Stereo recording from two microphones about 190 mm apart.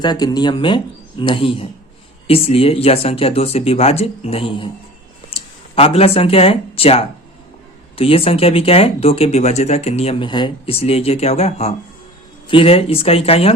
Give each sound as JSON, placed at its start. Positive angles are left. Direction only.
{"t": 0.0, "sound": "speech", "side_deg": 20}